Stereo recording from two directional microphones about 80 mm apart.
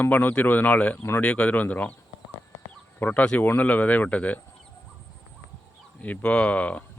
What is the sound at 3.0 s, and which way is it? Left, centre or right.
Speech, centre.